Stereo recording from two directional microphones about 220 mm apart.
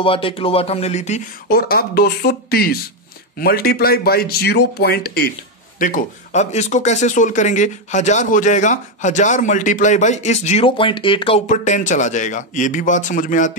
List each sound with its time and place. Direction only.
0.0 s speech: 25° left (ahead or behind)
1.5 s speech: 45° left (ahead or behind)